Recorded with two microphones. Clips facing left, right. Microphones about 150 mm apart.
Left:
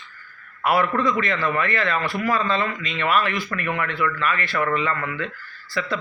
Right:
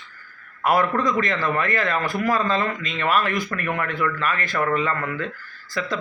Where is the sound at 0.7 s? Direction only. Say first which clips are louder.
Even; 40° right (ahead or behind).